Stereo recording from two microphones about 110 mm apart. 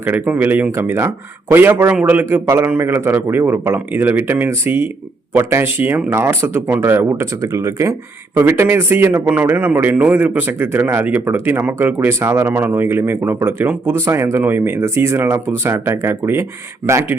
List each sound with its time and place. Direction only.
0.0 s a man's voice: 15° right (ahead or behind)